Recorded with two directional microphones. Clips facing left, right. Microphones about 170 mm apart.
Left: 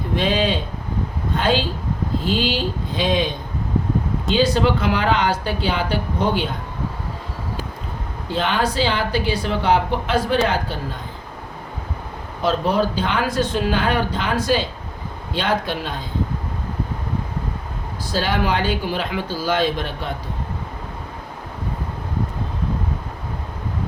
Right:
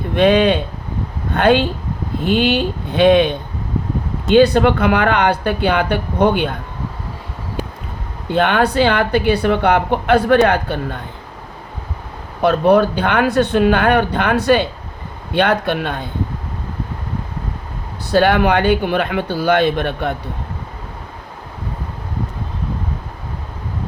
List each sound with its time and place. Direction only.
0.2 s a woman's voice: 60° right (ahead or behind)
8.3 s a woman's voice: 60° right (ahead or behind)
12.4 s a woman's voice: 60° right (ahead or behind)
18.1 s a woman's voice: 60° right (ahead or behind)